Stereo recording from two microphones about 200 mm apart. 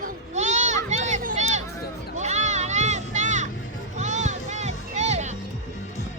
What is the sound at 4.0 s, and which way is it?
Music, 35° right (ahead or behind).